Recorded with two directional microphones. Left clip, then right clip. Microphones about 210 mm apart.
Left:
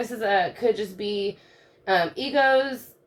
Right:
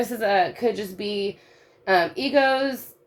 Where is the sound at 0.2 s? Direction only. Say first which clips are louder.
Right 1 dB; 40° right (ahead or behind).